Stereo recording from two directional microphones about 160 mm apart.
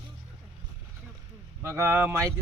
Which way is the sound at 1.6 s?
15° right (ahead or behind).